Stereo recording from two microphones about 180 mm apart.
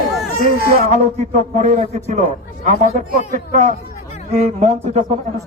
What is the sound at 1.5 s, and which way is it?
A man's voice, 40° right (ahead or behind).